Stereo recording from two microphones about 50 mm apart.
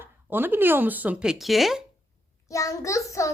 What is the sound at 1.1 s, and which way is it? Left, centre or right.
Speech, centre.